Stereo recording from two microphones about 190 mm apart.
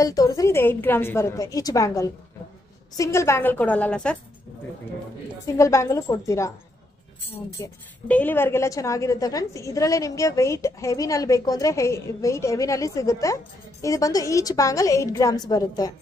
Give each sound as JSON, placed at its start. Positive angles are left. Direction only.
{"t": 0.0, "sound": "a woman's voice", "side_deg": 20}
{"t": 5.6, "sound": "a woman's voice", "side_deg": 15}
{"t": 7.5, "sound": "a woman's voice", "side_deg": 10}